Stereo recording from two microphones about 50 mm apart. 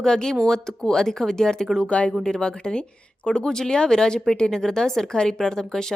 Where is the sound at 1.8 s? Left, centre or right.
Left.